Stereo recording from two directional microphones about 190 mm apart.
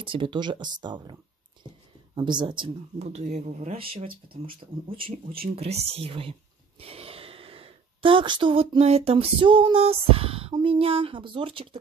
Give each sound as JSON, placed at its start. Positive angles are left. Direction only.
{"t": 0.0, "sound": "speech", "side_deg": -25}
{"t": 2.1, "sound": "speech", "side_deg": -25}
{"t": 5.0, "sound": "speech", "side_deg": -50}
{"t": 5.6, "sound": "speech", "side_deg": -35}